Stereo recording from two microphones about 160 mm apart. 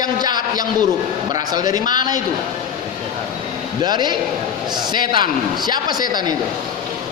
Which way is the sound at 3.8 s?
25° right (ahead or behind).